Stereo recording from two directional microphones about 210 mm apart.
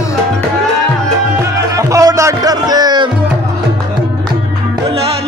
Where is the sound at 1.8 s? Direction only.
15° right (ahead or behind).